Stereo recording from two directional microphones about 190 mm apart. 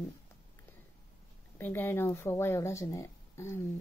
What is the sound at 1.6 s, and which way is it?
Speech, 10° left (ahead or behind).